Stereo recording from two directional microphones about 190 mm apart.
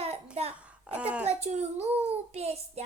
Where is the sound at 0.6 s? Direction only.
5° right (ahead or behind).